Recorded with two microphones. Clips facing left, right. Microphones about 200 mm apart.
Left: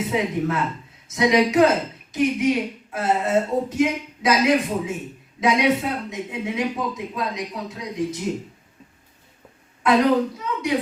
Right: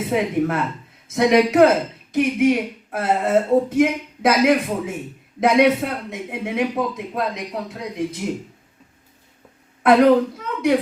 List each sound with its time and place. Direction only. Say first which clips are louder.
0.1 s a man's voice: right 6 dB; 55° right (ahead or behind)
9.8 s a man's voice: right 4 dB; 55° right (ahead or behind)